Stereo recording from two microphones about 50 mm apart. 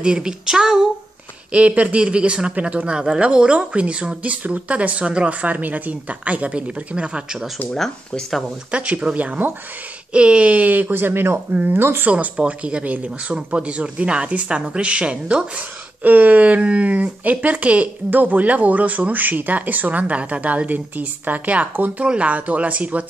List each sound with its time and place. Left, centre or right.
0.0 s a sound: centre
1.5 s speech: right
8.7 s speech: right
11.5 s speech: right
11.8 s speech: right
12.1 s speech: right
16.0 s speech: right